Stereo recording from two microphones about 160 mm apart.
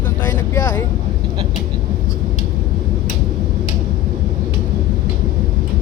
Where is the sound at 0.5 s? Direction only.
20° left (ahead or behind).